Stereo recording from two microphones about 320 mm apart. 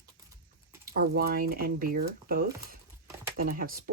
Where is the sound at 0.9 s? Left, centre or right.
Right.